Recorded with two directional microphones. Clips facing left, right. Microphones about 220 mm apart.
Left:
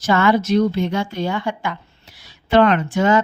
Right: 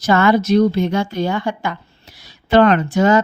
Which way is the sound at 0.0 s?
40° right (ahead or behind).